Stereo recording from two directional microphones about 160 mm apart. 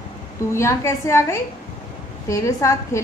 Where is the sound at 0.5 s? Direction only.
15° left (ahead or behind).